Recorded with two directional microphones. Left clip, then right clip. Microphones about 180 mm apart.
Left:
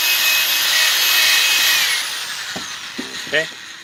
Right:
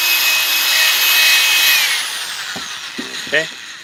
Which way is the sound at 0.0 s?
30° right (ahead or behind).